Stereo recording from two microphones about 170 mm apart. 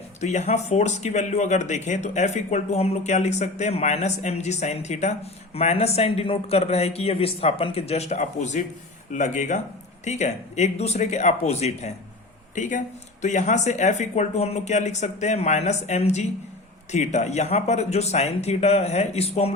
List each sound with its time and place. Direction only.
0.2 s speech: 40° left (ahead or behind)